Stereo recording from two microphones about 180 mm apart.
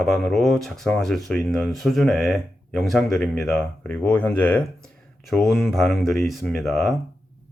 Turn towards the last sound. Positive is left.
turn(degrees=0)  # may be behind; listen again after turning